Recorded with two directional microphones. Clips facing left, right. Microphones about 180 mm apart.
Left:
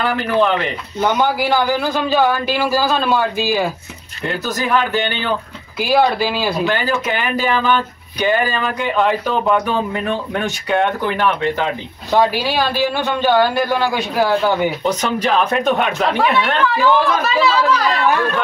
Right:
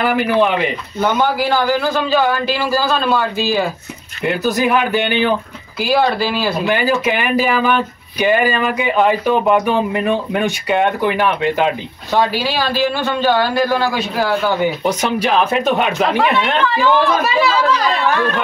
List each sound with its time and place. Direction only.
0.0 s speech: 10° right (ahead or behind)
1.1 s a man's voice: 15° left (ahead or behind)
4.2 s speech: 10° right (ahead or behind)
5.8 s a man's voice: 15° left (ahead or behind)
6.6 s speech: 10° right (ahead or behind)
12.1 s a man's voice: 15° left (ahead or behind)
14.9 s speech: 10° right (ahead or behind)